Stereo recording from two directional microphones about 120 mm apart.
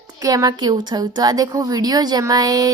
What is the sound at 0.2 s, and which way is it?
A woman's voice, 30° right (ahead or behind).